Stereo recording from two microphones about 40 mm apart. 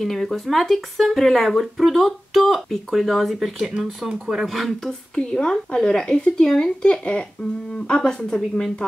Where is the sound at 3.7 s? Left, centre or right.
Centre.